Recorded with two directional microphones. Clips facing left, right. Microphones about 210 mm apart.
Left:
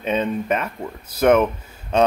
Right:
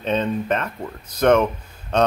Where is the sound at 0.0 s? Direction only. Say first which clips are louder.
Even; 10° left (ahead or behind).